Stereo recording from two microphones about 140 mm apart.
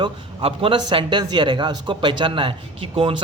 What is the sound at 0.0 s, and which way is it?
A man's voice, 40° right (ahead or behind).